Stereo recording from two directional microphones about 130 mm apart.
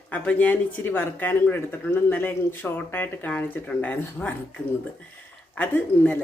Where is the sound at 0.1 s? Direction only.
10° left (ahead or behind).